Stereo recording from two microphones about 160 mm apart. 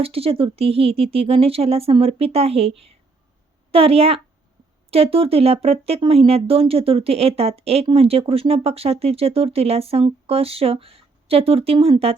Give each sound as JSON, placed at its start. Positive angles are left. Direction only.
{"t": 0.0, "sound": "speech", "side_deg": -35}